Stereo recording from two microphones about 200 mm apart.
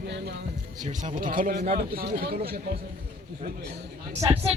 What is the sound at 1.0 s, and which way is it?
Speech, 40° right (ahead or behind).